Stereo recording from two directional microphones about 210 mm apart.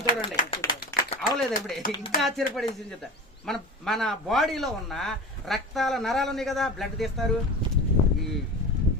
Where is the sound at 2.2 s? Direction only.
Centre (ahead or behind).